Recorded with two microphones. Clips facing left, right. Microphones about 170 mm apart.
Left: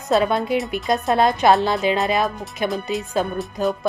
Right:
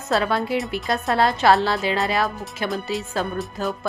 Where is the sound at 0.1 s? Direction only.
20° left (ahead or behind).